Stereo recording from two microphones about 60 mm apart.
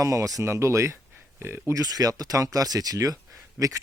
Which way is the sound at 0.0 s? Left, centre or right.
Right.